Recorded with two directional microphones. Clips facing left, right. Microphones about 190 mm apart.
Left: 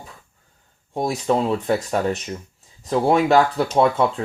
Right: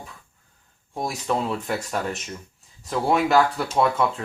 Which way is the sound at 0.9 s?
30° left (ahead or behind).